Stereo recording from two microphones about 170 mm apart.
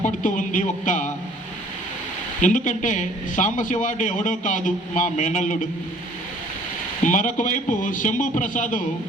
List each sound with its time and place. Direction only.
0.0 s a man's voice: 50° left (ahead or behind)
2.4 s a man's voice: 50° left (ahead or behind)
7.0 s a man's voice: 50° left (ahead or behind)